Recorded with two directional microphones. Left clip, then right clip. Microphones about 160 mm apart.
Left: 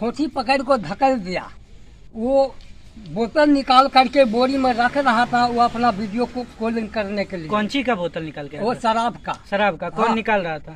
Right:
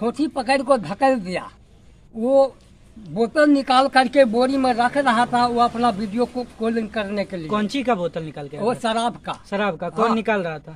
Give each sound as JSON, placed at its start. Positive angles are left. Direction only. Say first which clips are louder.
{"t": 0.0, "sound": "speech", "louder": "even", "side_deg": -15}
{"t": 7.4, "sound": "speech", "louder": "left 1 dB", "side_deg": -85}
{"t": 8.6, "sound": "speech", "louder": "left 2 dB", "side_deg": -10}
{"t": 9.5, "sound": "speech", "louder": "left 4 dB", "side_deg": -75}